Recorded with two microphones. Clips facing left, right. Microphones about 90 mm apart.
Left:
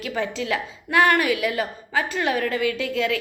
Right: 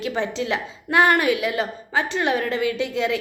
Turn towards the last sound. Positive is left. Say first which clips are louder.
# right 1 dB
turn(degrees=-25)  # may be behind; listen again after turning